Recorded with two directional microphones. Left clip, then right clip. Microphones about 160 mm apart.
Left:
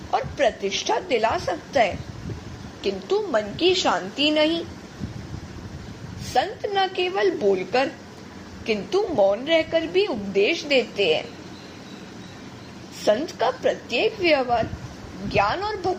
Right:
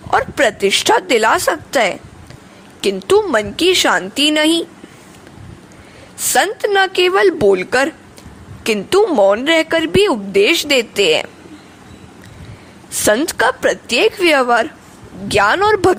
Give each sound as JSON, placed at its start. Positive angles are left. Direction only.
{"t": 0.1, "sound": "a woman's voice", "side_deg": -65}
{"t": 2.8, "sound": "a woman's voice", "side_deg": -70}
{"t": 6.3, "sound": "a woman's voice", "side_deg": -55}
{"t": 8.6, "sound": "a woman's voice", "side_deg": -70}
{"t": 13.1, "sound": "a woman's voice", "side_deg": -60}